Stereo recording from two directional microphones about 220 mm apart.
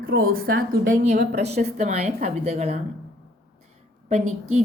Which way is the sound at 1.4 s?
30° right (ahead or behind).